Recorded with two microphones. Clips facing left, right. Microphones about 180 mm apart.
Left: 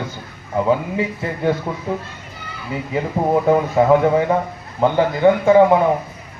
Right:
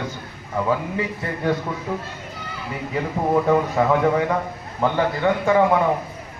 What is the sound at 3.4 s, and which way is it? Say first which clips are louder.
A man's voice: left 4 dB; 25° left (ahead or behind).